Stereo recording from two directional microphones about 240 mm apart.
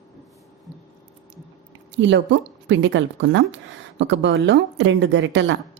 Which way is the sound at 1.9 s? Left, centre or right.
Right.